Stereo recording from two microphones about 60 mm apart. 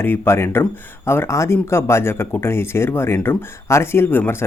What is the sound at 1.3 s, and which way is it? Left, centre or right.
Speech, left.